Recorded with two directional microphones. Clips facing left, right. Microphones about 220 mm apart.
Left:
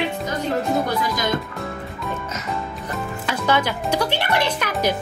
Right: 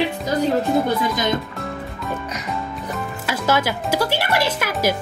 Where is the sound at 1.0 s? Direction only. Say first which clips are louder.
Right 2 dB; 20° right (ahead or behind).